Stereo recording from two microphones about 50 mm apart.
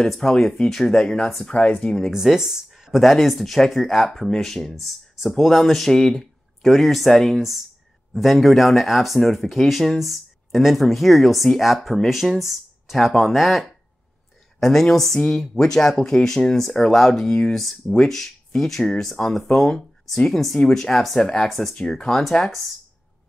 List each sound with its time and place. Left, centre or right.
0.0 s speech: centre
1.5 s speech: left
2.0 s speech: centre